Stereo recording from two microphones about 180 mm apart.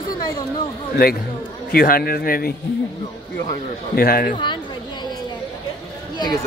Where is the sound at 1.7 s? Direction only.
55° left (ahead or behind).